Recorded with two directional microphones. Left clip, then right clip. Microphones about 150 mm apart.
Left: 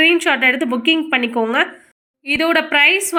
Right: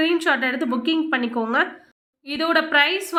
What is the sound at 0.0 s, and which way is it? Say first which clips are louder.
A woman's voice: left 7 dB; 15° left (ahead or behind).